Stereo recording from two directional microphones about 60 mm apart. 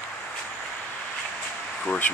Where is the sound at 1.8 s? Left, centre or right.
Left.